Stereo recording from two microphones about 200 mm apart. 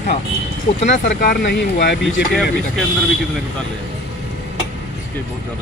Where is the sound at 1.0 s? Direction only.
50° left (ahead or behind).